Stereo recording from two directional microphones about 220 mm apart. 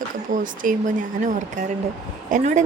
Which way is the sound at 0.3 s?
35° right (ahead or behind).